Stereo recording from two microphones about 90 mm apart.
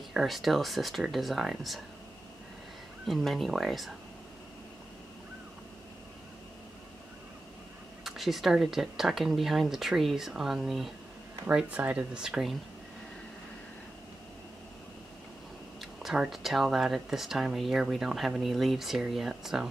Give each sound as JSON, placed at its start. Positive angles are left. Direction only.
{"t": 0.1, "sound": "speech", "side_deg": 0}
{"t": 3.1, "sound": "speech", "side_deg": 0}
{"t": 8.0, "sound": "speech", "side_deg": 0}
{"t": 11.5, "sound": "speech", "side_deg": -15}
{"t": 15.8, "sound": "speech", "side_deg": -5}